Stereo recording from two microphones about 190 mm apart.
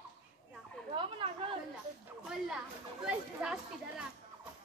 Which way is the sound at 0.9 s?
25° right (ahead or behind).